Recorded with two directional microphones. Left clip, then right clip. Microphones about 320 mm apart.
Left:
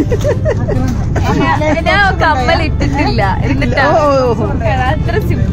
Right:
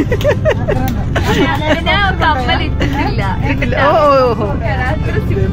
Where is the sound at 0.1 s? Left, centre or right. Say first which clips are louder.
Right 1 dB; centre.